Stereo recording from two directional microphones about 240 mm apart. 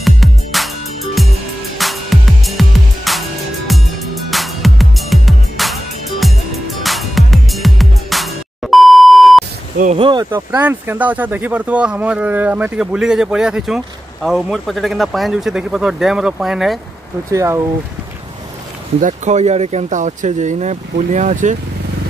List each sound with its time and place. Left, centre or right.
0.0 s music: centre
9.8 s speech: right
10.3 s speech: centre
17.3 s speech: centre
18.9 s speech: right